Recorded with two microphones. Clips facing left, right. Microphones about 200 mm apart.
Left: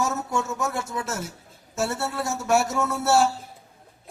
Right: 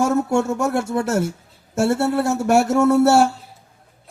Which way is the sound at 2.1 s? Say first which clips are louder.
Right 2 dB; 65° right (ahead or behind).